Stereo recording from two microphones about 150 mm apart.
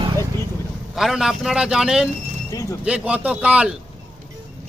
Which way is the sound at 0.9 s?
Centre (ahead or behind).